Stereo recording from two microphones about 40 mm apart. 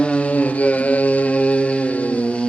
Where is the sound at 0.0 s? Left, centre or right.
Left.